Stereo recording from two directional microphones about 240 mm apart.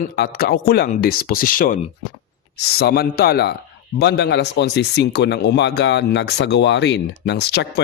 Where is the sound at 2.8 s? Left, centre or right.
Left.